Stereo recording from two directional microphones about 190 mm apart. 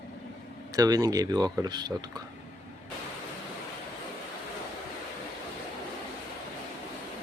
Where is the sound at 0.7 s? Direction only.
20° right (ahead or behind).